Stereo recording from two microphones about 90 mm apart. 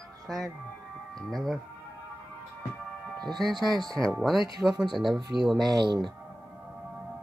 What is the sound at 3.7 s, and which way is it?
Speech, 45° right (ahead or behind).